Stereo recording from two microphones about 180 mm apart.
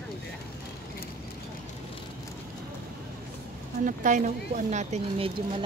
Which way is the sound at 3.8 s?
45° right (ahead or behind).